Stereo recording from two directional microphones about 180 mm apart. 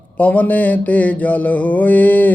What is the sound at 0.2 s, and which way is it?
Speech, 10° left (ahead or behind).